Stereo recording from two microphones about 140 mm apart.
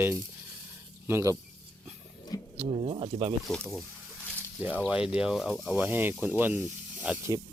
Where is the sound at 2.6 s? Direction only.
45° right (ahead or behind).